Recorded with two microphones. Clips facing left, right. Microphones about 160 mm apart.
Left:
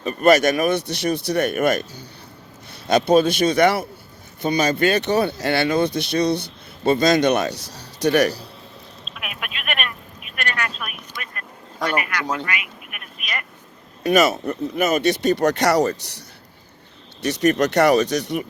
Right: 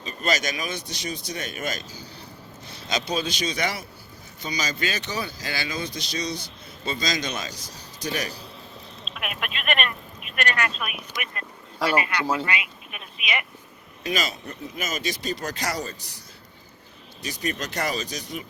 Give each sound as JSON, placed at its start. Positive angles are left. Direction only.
{"t": 0.0, "sound": "speech", "side_deg": 60}
{"t": 9.1, "sound": "telephone", "side_deg": 0}
{"t": 12.2, "sound": "speech", "side_deg": -5}
{"t": 14.0, "sound": "speech", "side_deg": 65}
{"t": 17.2, "sound": "speech", "side_deg": 70}